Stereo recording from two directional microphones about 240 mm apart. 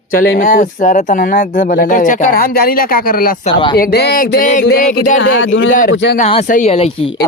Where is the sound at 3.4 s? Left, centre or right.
Left.